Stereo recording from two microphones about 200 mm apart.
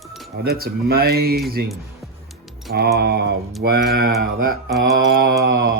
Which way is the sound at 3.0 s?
55° right (ahead or behind).